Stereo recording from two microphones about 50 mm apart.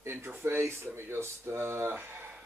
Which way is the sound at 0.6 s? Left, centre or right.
Right.